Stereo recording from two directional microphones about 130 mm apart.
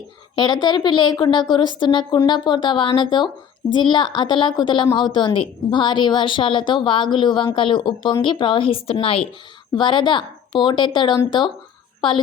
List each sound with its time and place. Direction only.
0.3 s a woman's voice: 35° left (ahead or behind)